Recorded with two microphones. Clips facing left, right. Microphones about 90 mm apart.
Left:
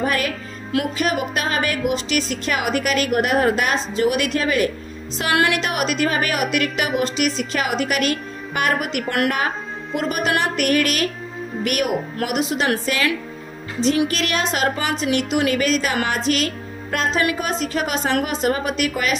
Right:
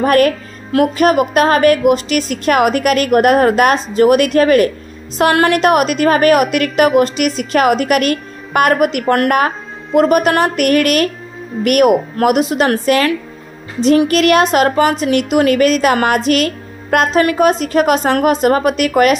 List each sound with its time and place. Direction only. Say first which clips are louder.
0.0 s a woman's voice: right 11 dB; 55° right (ahead or behind)